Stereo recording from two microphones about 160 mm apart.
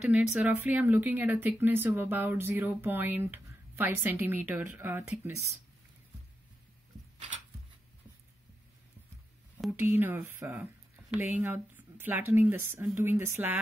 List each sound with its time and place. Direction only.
0.0 s speech: 5° right (ahead or behind)
9.6 s speech: 10° right (ahead or behind)